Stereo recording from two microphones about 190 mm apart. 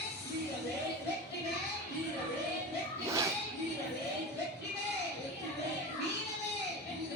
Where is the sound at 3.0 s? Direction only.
15° right (ahead or behind).